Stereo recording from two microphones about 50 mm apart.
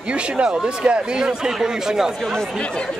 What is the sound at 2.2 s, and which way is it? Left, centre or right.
Speech, centre.